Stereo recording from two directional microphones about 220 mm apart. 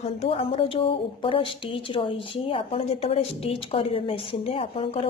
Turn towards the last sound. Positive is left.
turn(degrees=25)  # may be behind; listen again after turning